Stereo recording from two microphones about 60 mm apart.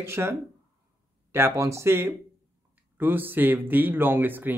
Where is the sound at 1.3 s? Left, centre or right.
Right.